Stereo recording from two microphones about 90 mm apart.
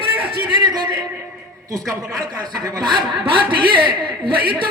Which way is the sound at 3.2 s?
75° right (ahead or behind).